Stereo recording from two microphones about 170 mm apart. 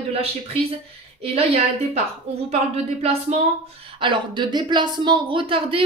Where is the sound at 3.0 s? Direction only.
40° right (ahead or behind).